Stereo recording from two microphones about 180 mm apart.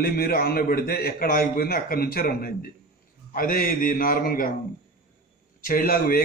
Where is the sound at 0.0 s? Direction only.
55° left (ahead or behind).